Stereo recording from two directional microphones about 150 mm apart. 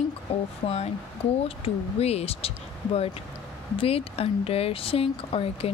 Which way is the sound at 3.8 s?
40° left (ahead or behind).